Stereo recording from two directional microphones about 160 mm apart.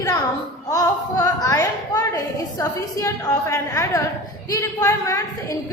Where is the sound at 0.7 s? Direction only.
20° left (ahead or behind).